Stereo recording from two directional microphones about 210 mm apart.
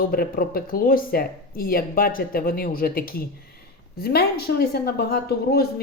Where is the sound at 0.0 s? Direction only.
45° left (ahead or behind).